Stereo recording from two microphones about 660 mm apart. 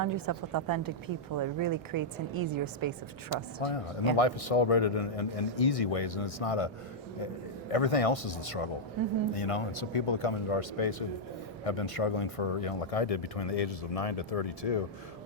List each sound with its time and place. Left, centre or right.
0.0 s a woman's voice: right
3.2 s speech: left
7.7 s speech: left